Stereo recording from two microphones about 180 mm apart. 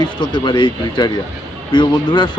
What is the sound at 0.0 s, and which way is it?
Speech, 25° left (ahead or behind).